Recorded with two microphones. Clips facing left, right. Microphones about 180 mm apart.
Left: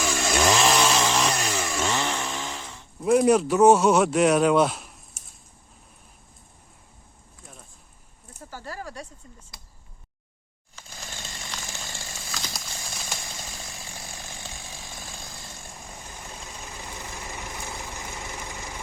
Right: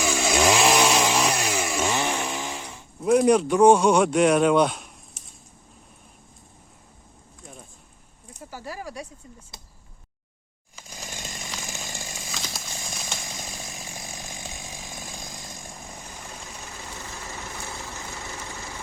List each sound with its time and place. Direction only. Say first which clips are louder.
0.0 s chainsaw: right 2 dB; 5° right (ahead or behind)
3.0 s speech: right 1 dB; centre (ahead or behind)
8.4 s speech: right 1 dB; 10° right (ahead or behind)
10.8 s chainsaw: right 2 dB; 15° right (ahead or behind)
12.3 s a sound: left 2 dB; centre (ahead or behind)
13.4 s chainsaw: right 2 dB; 20° right (ahead or behind)
16.6 s vehicle: even; 15° left (ahead or behind)